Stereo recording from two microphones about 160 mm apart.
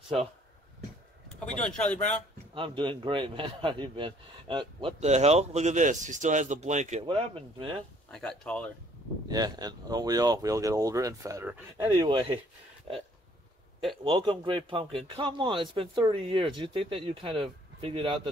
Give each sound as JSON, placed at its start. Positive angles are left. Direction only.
{"t": 1.4, "sound": "speech", "side_deg": 5}
{"t": 2.5, "sound": "speech", "side_deg": -35}
{"t": 5.0, "sound": "a man's voice", "side_deg": -45}
{"t": 7.1, "sound": "speech", "side_deg": -35}
{"t": 8.1, "sound": "speech", "side_deg": 5}
{"t": 9.3, "sound": "speech", "side_deg": -25}
{"t": 12.9, "sound": "a sound", "side_deg": -35}
{"t": 14.0, "sound": "speech", "side_deg": -35}